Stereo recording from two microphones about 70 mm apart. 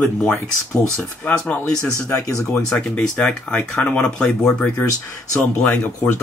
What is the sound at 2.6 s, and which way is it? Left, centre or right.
Speech, centre.